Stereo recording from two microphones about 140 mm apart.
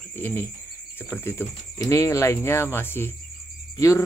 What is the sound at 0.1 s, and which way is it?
Speech, 15° left (ahead or behind).